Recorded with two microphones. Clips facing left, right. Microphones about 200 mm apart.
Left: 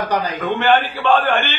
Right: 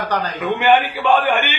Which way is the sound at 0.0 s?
10° left (ahead or behind).